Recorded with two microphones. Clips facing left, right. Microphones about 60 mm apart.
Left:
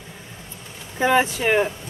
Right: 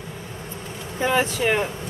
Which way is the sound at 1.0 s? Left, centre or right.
Centre.